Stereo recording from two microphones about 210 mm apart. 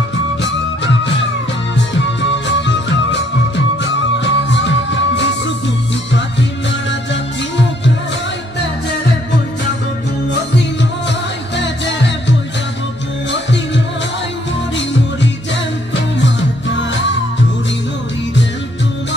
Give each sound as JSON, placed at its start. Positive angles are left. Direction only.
{"t": 2.4, "sound": "music", "side_deg": 60}
{"t": 16.2, "sound": "music", "side_deg": 60}